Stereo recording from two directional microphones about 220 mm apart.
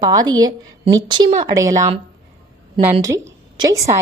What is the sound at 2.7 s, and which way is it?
Speech, 20° right (ahead or behind).